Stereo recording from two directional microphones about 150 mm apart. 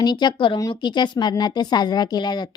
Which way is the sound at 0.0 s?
30° left (ahead or behind).